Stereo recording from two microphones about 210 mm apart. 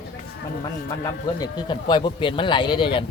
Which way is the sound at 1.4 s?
20° left (ahead or behind).